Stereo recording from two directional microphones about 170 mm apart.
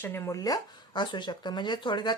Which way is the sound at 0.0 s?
15° left (ahead or behind).